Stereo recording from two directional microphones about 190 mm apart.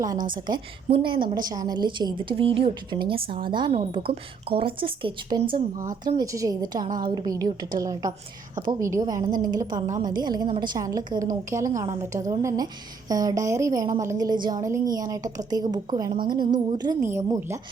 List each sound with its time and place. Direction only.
0.3 s a woman's voice: 25° right (ahead or behind)
5.7 s a woman's voice: 20° right (ahead or behind)